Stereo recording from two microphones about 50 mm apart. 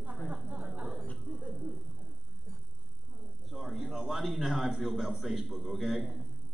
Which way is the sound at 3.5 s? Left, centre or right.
Centre.